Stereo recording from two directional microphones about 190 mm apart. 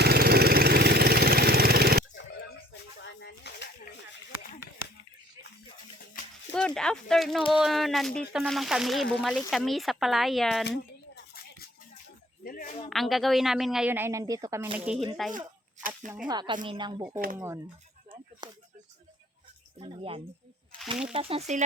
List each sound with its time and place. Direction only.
0.0 s engine: 55° right (ahead or behind)
3.0 s a sound: 65° left (ahead or behind)
6.5 s a woman's voice: 5° left (ahead or behind)
10.6 s a sound: 60° left (ahead or behind)
12.5 s speech: 50° left (ahead or behind)
12.9 s a woman's voice: centre (ahead or behind); by 14.7 s 15° right (ahead or behind)
15.3 s a sound: 45° right (ahead or behind)
16.2 s speech: 25° right (ahead or behind)
17.3 s speech: 15° right (ahead or behind)
19.8 s speech: 30° right (ahead or behind)